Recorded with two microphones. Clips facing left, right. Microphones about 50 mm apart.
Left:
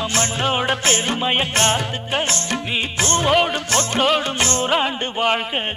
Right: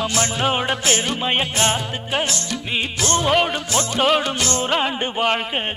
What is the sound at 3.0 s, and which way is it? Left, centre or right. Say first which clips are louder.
Music: even; left.